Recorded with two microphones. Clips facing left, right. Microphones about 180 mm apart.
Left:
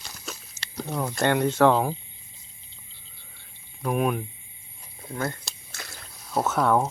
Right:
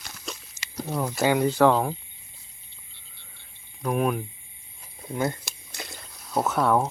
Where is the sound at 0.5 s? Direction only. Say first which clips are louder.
Right 1 dB; 5° right (ahead or behind).